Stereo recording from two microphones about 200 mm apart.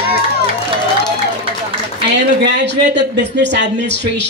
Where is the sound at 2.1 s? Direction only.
60° right (ahead or behind).